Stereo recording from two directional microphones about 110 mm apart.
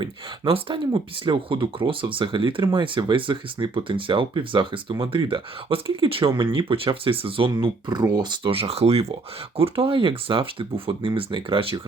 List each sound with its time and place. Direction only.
0.0 s speech: 50° right (ahead or behind)
8.4 s speech: 60° right (ahead or behind)